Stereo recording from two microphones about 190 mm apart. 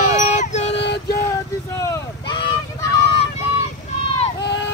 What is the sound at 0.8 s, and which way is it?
Music, 60° left (ahead or behind).